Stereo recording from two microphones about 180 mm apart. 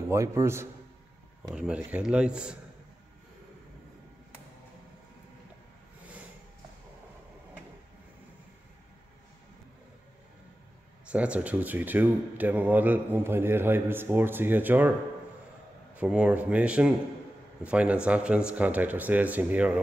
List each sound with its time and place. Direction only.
0.1 s speech: 15° right (ahead or behind)
11.1 s speech: 5° right (ahead or behind)